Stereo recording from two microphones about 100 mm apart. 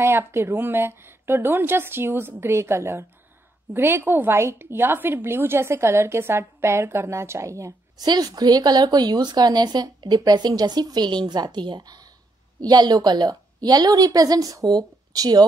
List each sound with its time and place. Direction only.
0.0 s a woman's voice: 25° right (ahead or behind)
8.1 s a woman's voice: 40° right (ahead or behind)